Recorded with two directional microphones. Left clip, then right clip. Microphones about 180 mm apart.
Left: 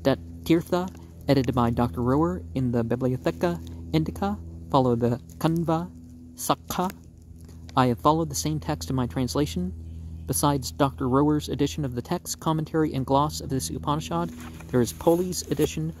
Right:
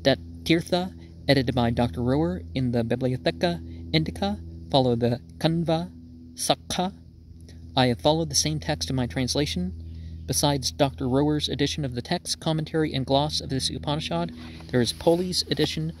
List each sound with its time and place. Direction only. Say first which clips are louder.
0.0 s speech: right 2 dB; 45° right (ahead or behind)